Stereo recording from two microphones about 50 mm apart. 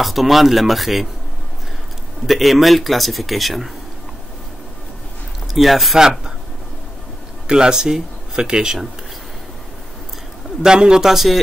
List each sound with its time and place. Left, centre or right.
0.0 s speech: centre
2.2 s speech: centre
5.5 s a man's voice: centre
7.4 s speech: centre
10.6 s a man's voice: centre